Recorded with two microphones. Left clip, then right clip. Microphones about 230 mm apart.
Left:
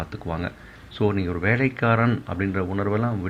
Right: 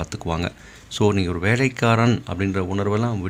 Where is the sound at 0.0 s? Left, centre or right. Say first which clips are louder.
Right 4 dB; right.